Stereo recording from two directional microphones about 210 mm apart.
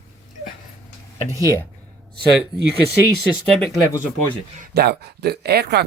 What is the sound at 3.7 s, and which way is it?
Speech, 15° left (ahead or behind).